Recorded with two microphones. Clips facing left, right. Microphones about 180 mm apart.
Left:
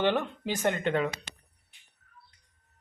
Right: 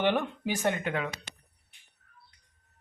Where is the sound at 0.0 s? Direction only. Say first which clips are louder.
Even; 15° right (ahead or behind).